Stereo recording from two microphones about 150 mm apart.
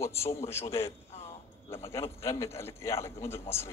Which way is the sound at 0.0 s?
20° left (ahead or behind).